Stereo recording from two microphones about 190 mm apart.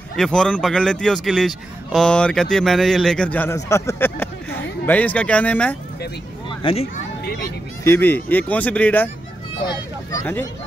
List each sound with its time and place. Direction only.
0.1 s a man's voice: 5° left (ahead or behind)
6.6 s speech: 30° left (ahead or behind)
7.8 s speech: 10° left (ahead or behind)
10.1 s speech: 10° left (ahead or behind)